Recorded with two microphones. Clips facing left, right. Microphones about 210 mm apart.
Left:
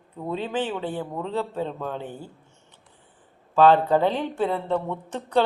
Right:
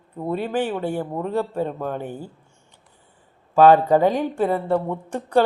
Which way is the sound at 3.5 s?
10° right (ahead or behind).